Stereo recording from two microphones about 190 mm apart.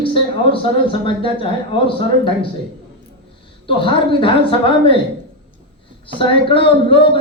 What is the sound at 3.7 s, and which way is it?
A man's voice, 25° left (ahead or behind).